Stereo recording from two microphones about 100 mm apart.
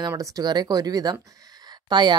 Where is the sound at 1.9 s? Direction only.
50° right (ahead or behind).